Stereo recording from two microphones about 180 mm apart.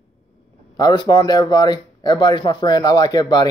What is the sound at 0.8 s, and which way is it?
Speech, 20° left (ahead or behind).